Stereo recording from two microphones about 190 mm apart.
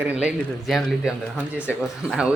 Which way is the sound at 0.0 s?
5° right (ahead or behind).